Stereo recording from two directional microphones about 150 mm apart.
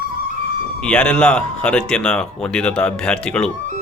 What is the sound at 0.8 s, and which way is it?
Speech, 5° left (ahead or behind).